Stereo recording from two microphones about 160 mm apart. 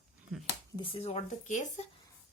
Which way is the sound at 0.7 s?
35° left (ahead or behind).